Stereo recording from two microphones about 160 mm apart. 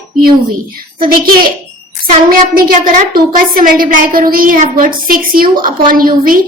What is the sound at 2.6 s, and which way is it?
A woman's voice, 60° right (ahead or behind).